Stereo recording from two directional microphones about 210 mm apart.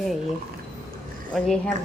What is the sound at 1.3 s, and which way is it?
Speech, centre (ahead or behind).